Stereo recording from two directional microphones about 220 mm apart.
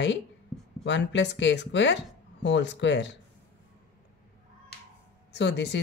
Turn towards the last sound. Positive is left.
turn(degrees=50)  # may be behind; listen again after turning